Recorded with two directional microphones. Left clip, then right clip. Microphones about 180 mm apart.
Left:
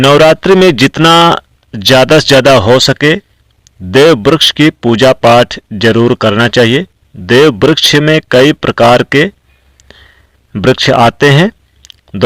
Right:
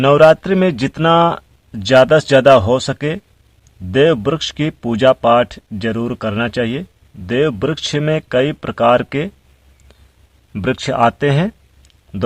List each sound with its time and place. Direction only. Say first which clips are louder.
0.0 s speech: left 4 dB; 30° left (ahead or behind)
10.5 s speech: left 11 dB; 25° left (ahead or behind)